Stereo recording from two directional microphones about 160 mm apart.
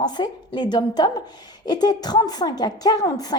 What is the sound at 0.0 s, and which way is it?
A woman's voice, 25° left (ahead or behind).